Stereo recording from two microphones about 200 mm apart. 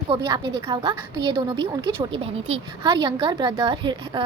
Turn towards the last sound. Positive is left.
turn(degrees=-25)  # may be behind; listen again after turning